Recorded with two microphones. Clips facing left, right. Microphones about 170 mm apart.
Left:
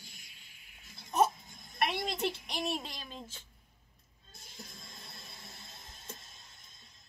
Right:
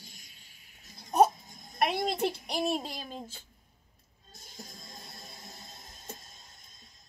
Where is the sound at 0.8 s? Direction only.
45° right (ahead or behind).